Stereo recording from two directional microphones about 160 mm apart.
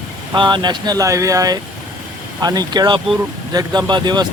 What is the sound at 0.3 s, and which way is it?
Speech, 30° right (ahead or behind).